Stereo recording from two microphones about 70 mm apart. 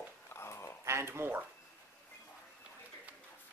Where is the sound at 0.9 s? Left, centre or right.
Right.